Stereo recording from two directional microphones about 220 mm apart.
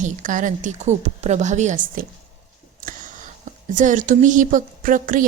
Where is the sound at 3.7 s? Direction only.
35° right (ahead or behind).